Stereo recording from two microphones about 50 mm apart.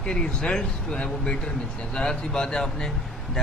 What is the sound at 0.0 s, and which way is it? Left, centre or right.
Speech, centre.